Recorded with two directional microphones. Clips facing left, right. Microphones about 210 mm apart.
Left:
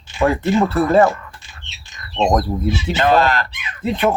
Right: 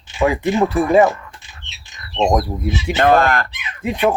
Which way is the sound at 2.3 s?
10° right (ahead or behind).